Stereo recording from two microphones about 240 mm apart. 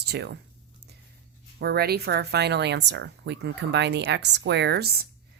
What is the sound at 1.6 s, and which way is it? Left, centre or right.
Speech, right.